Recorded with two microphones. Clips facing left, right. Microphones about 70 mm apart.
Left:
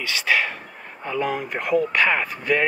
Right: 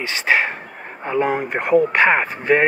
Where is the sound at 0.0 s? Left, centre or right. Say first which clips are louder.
Right 3 dB; right.